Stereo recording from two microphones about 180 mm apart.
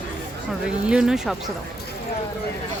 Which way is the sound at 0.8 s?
5° right (ahead or behind).